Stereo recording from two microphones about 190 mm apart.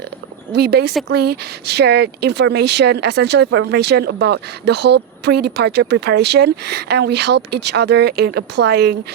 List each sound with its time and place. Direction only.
0.5 s speech: 60° right (ahead or behind)